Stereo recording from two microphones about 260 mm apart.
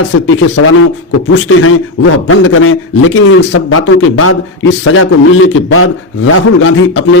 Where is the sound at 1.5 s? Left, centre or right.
Left.